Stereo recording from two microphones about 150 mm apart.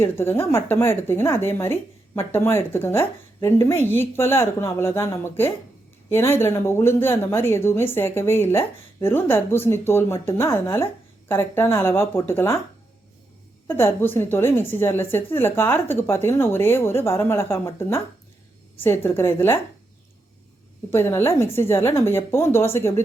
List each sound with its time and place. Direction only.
0.0 s speech: 15° left (ahead or behind)
13.7 s speech: 15° left (ahead or behind)
20.9 s speech: 15° left (ahead or behind)